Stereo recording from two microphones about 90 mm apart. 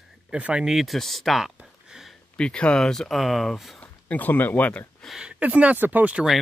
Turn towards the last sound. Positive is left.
turn(degrees=-15)  # may be behind; listen again after turning